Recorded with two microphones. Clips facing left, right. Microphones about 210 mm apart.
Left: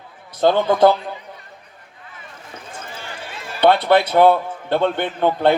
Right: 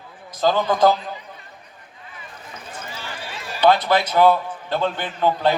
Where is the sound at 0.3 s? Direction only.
60° left (ahead or behind).